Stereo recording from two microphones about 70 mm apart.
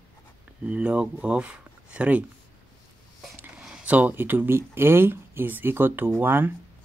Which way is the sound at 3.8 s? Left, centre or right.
Right.